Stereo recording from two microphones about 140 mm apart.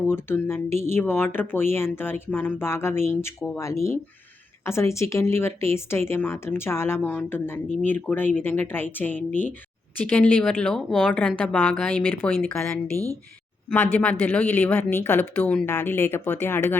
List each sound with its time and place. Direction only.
0.1 s speech: 15° left (ahead or behind)